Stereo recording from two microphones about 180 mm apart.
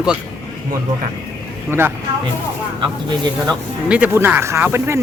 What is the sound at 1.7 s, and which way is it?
Speech, 15° right (ahead or behind).